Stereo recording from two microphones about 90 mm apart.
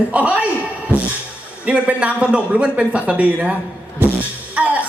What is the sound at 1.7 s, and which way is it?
A man's voice, 15° right (ahead or behind).